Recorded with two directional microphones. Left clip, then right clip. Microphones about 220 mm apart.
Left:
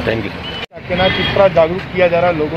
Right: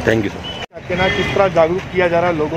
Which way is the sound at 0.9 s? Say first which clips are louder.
Left 3 dB; 45° right (ahead or behind).